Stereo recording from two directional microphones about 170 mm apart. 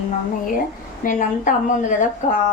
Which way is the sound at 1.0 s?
50° left (ahead or behind).